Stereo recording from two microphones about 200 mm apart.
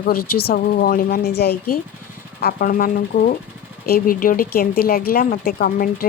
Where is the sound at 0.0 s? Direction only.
50° left (ahead or behind).